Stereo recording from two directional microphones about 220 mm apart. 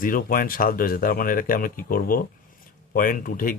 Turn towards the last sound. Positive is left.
turn(degrees=40)  # may be behind; listen again after turning